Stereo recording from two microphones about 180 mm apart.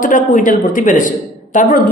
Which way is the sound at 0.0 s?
45° left (ahead or behind).